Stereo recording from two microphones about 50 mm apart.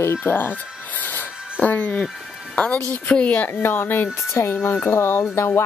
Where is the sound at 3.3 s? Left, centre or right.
Left.